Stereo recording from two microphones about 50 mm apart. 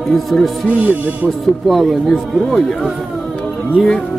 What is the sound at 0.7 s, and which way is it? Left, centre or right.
Speech, right.